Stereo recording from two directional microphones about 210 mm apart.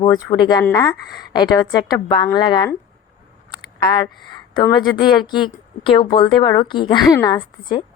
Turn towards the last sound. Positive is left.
turn(degrees=20)  # may be behind; listen again after turning